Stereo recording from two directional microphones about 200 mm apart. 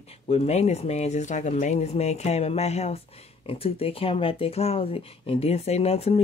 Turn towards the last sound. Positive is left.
turn(degrees=30)  # may be behind; listen again after turning